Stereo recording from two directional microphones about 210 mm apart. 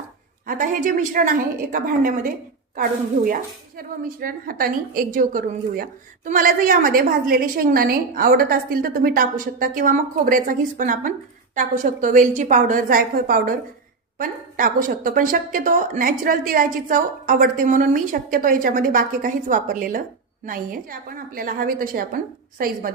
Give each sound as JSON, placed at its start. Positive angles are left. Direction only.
{"t": 0.4, "sound": "a woman's voice", "side_deg": -40}